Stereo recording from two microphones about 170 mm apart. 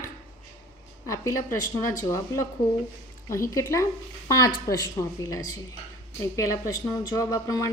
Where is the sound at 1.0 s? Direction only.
20° left (ahead or behind).